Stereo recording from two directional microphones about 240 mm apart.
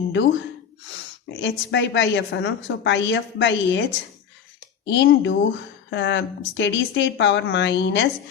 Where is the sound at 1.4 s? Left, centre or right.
Left.